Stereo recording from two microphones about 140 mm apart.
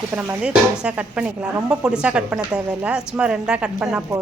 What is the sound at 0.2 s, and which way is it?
A woman's voice, 10° right (ahead or behind).